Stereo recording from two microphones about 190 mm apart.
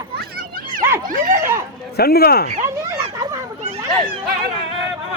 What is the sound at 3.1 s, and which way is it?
Speech, 20° right (ahead or behind).